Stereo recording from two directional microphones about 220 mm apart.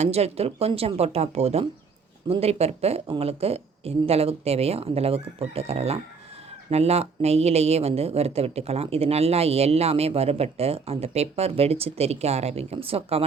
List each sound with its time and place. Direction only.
0.0 s speech: 30° right (ahead or behind)